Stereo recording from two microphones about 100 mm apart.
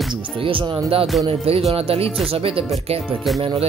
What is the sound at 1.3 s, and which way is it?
Speech, 85° right.